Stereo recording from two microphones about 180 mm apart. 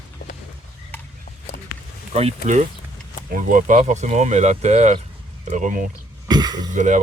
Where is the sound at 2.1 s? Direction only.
35° right (ahead or behind).